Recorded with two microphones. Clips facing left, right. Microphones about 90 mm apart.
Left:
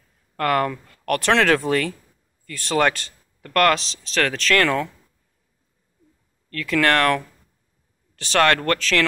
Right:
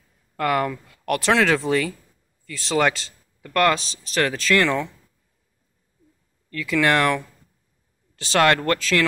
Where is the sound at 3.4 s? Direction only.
5° right (ahead or behind).